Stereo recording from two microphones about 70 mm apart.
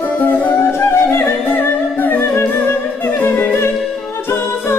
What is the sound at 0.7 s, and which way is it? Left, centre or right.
Music, left.